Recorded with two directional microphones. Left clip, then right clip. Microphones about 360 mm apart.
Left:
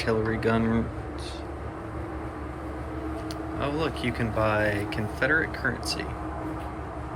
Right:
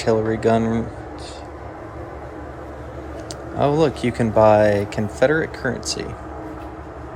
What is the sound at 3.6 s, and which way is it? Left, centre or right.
Speech, centre.